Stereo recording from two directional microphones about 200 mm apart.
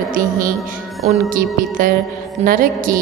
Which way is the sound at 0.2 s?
45° right (ahead or behind).